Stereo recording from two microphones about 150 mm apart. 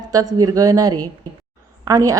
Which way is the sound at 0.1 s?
25° right (ahead or behind).